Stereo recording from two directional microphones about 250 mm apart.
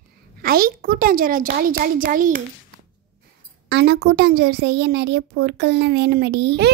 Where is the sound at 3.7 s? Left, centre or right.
Right.